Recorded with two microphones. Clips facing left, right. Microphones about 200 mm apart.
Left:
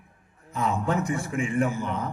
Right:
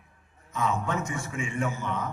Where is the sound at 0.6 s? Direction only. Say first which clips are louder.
Left 3 dB; 35° left (ahead or behind).